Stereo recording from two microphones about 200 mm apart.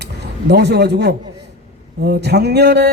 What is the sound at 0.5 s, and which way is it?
A man's voice, 55° right (ahead or behind).